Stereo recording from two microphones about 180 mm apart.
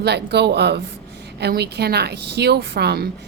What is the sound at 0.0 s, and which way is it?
A woman's voice, 65° right (ahead or behind).